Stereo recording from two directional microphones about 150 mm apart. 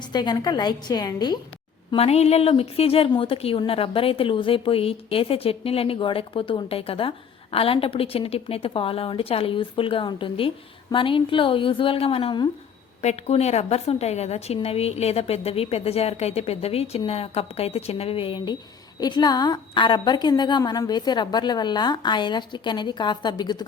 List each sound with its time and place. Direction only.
0.1 s a woman's voice: 30° left (ahead or behind)
1.9 s a woman's voice: 45° left (ahead or behind)
13.0 s a woman's voice: 45° left (ahead or behind); by 23.6 s 30° left (ahead or behind)